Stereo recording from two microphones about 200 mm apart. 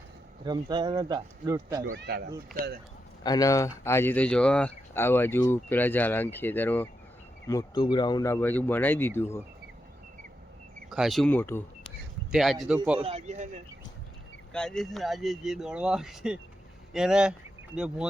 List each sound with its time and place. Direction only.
0.4 s speech: 20° right (ahead or behind)
1.8 s speech: 60° right (ahead or behind)
3.2 s speech: 20° left (ahead or behind)
7.4 s speech: 20° left (ahead or behind)
10.8 s speech: centre (ahead or behind)
12.3 s speech: centre (ahead or behind)
13.0 s speech: 30° right (ahead or behind)
14.5 s speech: 5° left (ahead or behind)